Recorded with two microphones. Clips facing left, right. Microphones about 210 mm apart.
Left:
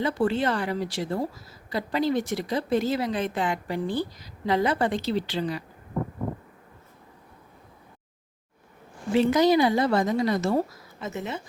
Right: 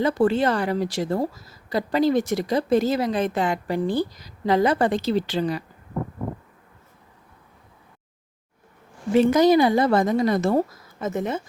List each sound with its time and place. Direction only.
0.0 s a woman's voice: 40° right (ahead or behind)
9.1 s a woman's voice: 50° right (ahead or behind)